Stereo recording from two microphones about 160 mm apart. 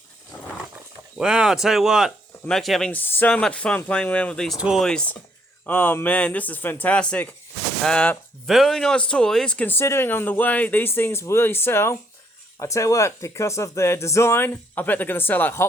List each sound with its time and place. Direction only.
1.2 s speech: 5° right (ahead or behind); by 15.6 s 10° left (ahead or behind)